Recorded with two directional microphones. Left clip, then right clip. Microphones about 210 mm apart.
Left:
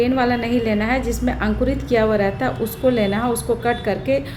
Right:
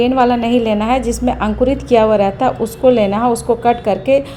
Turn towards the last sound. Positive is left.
turn(degrees=-20)  # may be behind; listen again after turning